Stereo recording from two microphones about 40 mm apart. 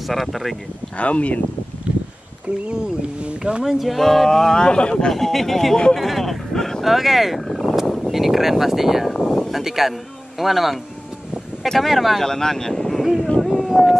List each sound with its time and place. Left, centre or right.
0.0 s speech: centre
0.9 s speech: left
1.9 s a sound: right
2.7 s speech: right
3.6 s speech: centre
4.6 s speech: left
5.0 s speech: centre
6.8 s speech: centre
11.8 s speech: centre
12.3 s speech: centre
13.4 s a sound: centre